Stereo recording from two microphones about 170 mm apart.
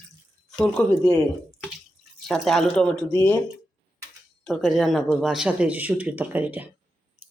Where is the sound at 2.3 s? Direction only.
Centre (ahead or behind).